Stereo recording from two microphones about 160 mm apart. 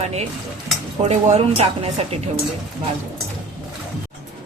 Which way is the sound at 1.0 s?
45° right (ahead or behind).